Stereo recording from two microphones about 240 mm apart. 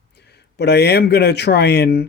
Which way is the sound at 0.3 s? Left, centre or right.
Left.